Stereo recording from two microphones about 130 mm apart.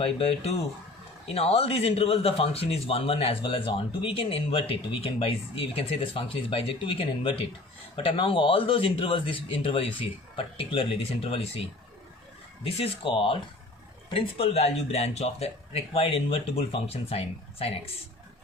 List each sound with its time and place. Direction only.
0.0 s speech: 45° left (ahead or behind)
12.6 s speech: 45° left (ahead or behind)